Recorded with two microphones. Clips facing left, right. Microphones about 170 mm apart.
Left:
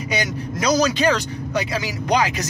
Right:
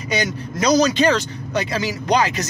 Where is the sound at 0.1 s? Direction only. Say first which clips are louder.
Right 3 dB; 10° left (ahead or behind).